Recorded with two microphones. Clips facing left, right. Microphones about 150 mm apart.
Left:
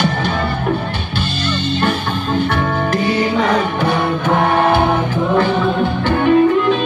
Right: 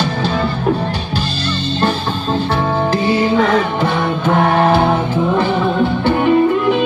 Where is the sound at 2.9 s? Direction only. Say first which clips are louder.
Right 1 dB; 30° right (ahead or behind).